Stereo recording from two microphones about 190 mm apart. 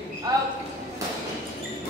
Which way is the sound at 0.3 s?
20° right (ahead or behind).